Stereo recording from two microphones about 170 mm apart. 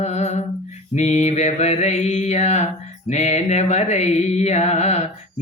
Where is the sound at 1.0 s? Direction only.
40° left (ahead or behind).